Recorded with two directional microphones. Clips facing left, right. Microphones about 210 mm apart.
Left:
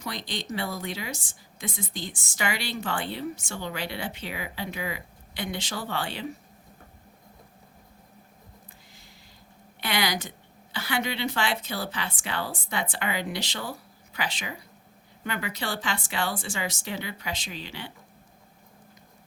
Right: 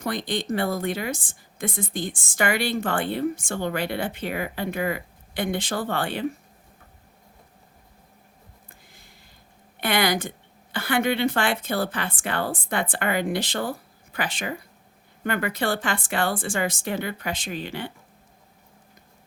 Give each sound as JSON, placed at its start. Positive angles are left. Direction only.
{"t": 0.0, "sound": "a woman's voice", "side_deg": -55}
{"t": 8.9, "sound": "a sound", "side_deg": -55}
{"t": 9.8, "sound": "a woman's voice", "side_deg": -55}